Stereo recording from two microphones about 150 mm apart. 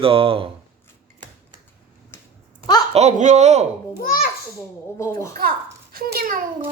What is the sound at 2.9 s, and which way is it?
Speech, 50° right (ahead or behind).